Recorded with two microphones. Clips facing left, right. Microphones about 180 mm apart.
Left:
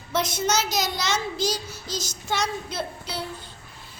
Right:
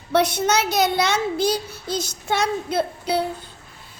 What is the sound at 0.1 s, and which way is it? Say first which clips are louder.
A child's voice: right 6 dB; 65° right (ahead or behind).